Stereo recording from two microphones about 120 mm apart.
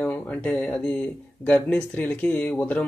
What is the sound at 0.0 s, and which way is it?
A man's voice, 10° left (ahead or behind).